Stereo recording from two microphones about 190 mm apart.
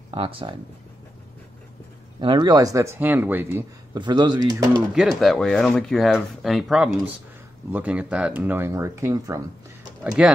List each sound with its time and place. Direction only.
0.1 s speech: 30° right (ahead or behind)
2.1 s speech: 20° right (ahead or behind)
3.9 s speech: 20° right (ahead or behind)
4.9 s speech: centre (ahead or behind); by 9.4 s 15° right (ahead or behind)
10.0 s speech: 5° right (ahead or behind)